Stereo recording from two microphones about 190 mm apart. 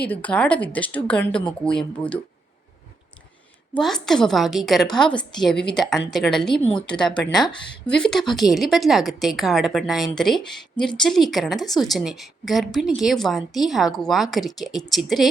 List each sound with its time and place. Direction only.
0.1 s a woman's voice: 5° left (ahead or behind)
3.8 s a woman's voice: centre (ahead or behind)
6.6 s speech: 35° left (ahead or behind)
7.9 s a woman's voice: 5° left (ahead or behind)